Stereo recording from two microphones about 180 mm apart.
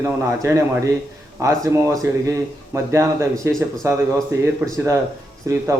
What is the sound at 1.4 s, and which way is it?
A man's voice, 15° right (ahead or behind).